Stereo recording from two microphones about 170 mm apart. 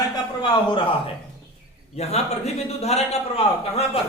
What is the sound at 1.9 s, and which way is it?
A man's voice, 40° left (ahead or behind).